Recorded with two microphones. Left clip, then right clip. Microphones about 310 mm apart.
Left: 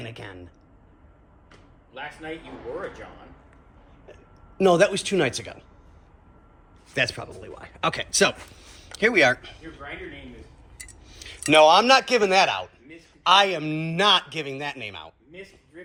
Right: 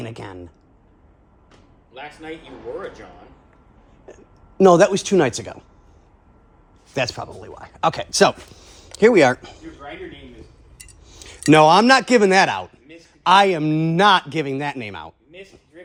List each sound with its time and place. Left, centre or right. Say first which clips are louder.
0.0 s a man's voice: right 5 dB; right
1.9 s a man's voice: right 1 dB; centre
4.0 s speech: right 5 dB; right
6.9 s speech: right 2 dB; centre
11.1 s a man's voice: right 4 dB; right